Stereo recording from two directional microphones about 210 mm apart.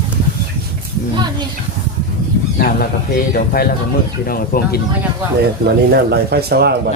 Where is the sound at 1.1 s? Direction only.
20° right (ahead or behind).